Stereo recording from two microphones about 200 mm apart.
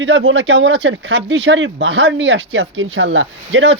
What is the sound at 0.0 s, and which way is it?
Speech, 65° right (ahead or behind).